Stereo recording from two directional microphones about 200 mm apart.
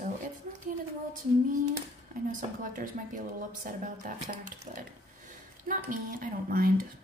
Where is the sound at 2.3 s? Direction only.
40° right (ahead or behind).